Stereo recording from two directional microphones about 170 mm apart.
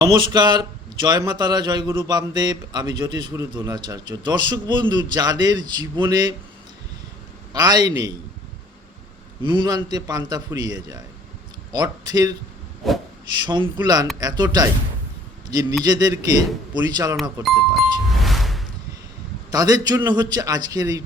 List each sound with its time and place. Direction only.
0.0 s a man's voice: 25° right (ahead or behind)
7.5 s a man's voice: 25° right (ahead or behind)
9.4 s a man's voice: 25° right (ahead or behind)
12.8 s speech: centre (ahead or behind)
13.4 s a man's voice: 25° right (ahead or behind)
15.8 s a man's voice: 20° right (ahead or behind)
17.4 s music: centre (ahead or behind)
19.5 s a man's voice: 20° right (ahead or behind)